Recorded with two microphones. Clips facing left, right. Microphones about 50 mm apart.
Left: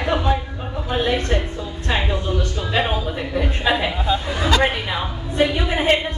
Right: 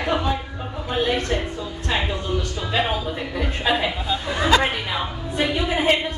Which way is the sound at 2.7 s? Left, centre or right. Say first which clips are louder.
Left 1 dB; centre.